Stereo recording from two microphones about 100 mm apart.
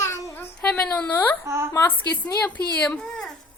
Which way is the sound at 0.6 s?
10° left (ahead or behind).